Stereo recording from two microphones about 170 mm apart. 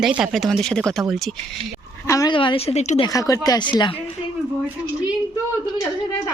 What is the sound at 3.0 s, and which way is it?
Speech, 20° left (ahead or behind).